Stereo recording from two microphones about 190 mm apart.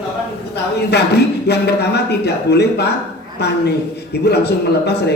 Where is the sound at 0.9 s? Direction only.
60° left (ahead or behind).